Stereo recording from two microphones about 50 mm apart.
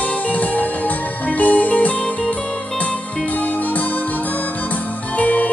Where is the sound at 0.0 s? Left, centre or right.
Left.